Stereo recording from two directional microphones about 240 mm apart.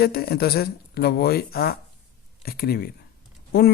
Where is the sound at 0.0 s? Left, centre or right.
Left.